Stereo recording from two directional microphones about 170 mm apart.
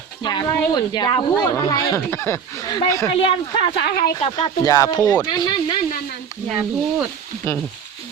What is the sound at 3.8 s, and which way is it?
Speech, 75° left (ahead or behind).